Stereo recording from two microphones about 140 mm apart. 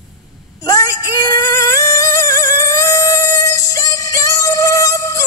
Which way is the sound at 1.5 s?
25° left (ahead or behind).